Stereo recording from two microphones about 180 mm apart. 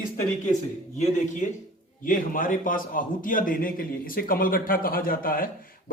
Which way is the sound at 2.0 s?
50° left (ahead or behind).